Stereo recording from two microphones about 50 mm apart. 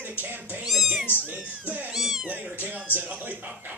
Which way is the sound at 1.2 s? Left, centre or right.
Right.